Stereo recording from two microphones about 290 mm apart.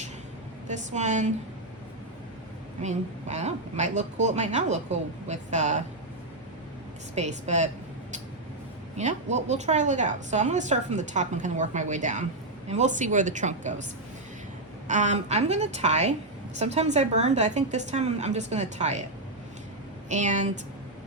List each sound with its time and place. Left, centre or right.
0.7 s a woman's voice: right
2.8 s a woman's voice: right
7.2 s a woman's voice: right
9.0 s a woman's voice: right
14.8 s a woman's voice: right
20.1 s a woman's voice: right